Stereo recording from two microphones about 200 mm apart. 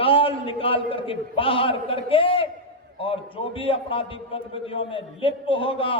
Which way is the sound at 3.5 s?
25° left (ahead or behind).